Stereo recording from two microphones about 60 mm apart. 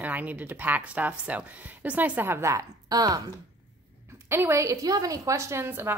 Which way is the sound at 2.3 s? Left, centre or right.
Right.